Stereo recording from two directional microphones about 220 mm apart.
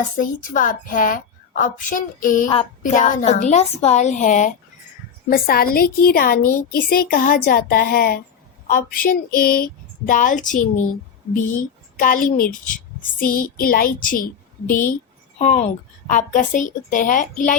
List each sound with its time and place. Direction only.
0.0 s a woman's voice: 35° left (ahead or behind)
14.7 s speech: 10° left (ahead or behind)
15.4 s a woman's voice: 30° left (ahead or behind)